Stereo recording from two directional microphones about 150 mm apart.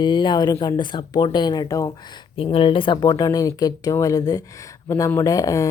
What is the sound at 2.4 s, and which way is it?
Speech, 35° left (ahead or behind).